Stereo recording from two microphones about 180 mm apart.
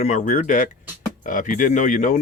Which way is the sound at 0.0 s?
40° left (ahead or behind).